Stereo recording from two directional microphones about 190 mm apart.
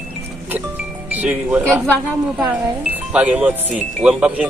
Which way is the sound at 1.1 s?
10° right (ahead or behind).